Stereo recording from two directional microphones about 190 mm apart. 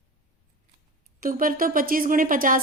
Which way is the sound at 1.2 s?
45° right (ahead or behind).